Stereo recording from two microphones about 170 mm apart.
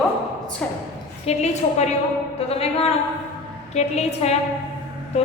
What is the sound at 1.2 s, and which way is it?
A woman's voice, 40° left (ahead or behind).